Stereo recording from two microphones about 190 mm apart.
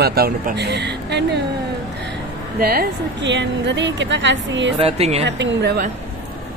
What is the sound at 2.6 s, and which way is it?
A woman's voice, 55° right (ahead or behind).